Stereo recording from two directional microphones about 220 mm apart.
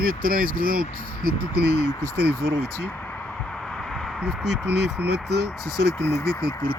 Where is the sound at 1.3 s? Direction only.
80° right.